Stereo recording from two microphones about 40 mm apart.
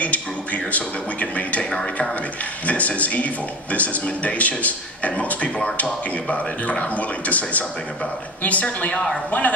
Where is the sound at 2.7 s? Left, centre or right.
Left.